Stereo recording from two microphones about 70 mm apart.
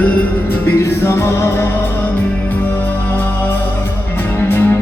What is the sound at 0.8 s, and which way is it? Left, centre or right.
Music, left.